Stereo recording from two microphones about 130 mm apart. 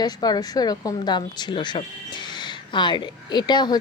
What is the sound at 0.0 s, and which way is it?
Speech, 30° left (ahead or behind).